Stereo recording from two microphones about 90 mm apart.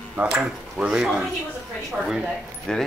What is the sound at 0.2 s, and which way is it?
Speech, 20° right (ahead or behind).